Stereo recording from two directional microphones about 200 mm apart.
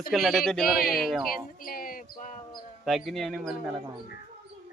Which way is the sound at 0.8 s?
50° left (ahead or behind).